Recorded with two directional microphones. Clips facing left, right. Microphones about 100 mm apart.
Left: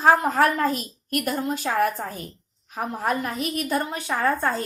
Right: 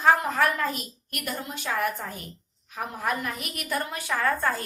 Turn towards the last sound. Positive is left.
turn(degrees=25)  # may be behind; listen again after turning